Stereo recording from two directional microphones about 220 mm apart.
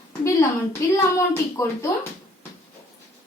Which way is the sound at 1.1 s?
15° left (ahead or behind).